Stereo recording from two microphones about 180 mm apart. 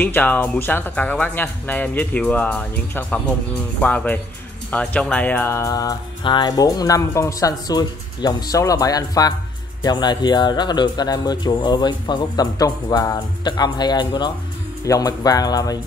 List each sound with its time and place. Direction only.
0.0 s speech: 10° left (ahead or behind)